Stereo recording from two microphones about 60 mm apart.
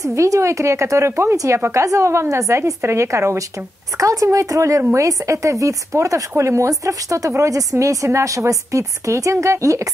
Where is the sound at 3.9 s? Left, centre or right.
Right.